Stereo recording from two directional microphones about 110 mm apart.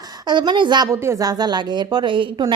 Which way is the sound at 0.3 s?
45° right (ahead or behind).